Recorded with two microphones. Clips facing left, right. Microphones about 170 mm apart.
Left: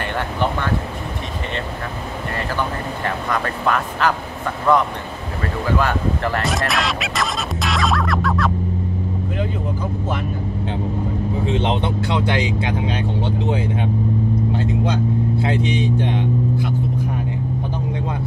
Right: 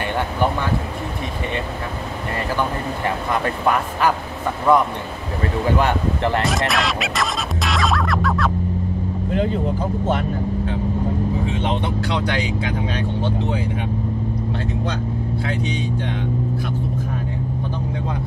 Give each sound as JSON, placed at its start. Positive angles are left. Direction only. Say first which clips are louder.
{"t": 3.3, "sound": "speech", "louder": "right 1 dB", "side_deg": -15}
{"t": 5.8, "sound": "speech", "louder": "right 1 dB", "side_deg": -20}
{"t": 6.7, "sound": "music", "louder": "right 1 dB", "side_deg": 0}
{"t": 11.5, "sound": "speech", "louder": "left 2 dB", "side_deg": 25}
{"t": 14.9, "sound": "speech", "louder": "left 5 dB", "side_deg": 20}